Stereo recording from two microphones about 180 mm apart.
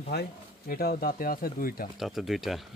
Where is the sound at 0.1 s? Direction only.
60° left (ahead or behind).